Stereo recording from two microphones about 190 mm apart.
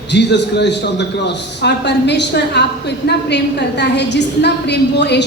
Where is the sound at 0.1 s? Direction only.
65° left (ahead or behind).